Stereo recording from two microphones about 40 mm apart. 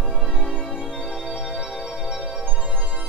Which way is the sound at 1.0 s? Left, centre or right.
Centre.